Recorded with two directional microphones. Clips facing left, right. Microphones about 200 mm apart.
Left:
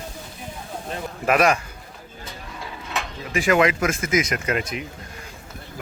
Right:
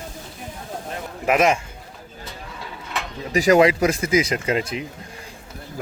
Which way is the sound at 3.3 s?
40° right (ahead or behind).